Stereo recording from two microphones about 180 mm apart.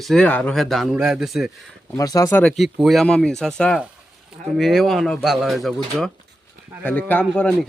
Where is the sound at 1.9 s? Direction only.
20° left (ahead or behind).